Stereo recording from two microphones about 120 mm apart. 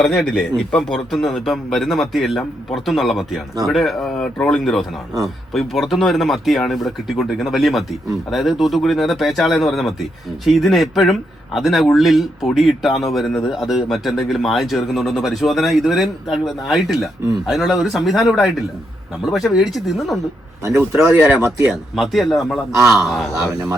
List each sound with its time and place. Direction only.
0.0 s speech: centre (ahead or behind)
20.7 s speech: 20° right (ahead or behind)
21.9 s speech: centre (ahead or behind)